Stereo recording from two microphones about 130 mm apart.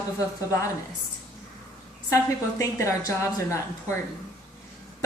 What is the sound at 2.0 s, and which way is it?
A woman's voice, 25° left (ahead or behind).